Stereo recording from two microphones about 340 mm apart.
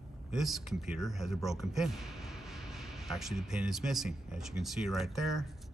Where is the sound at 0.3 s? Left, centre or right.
Centre.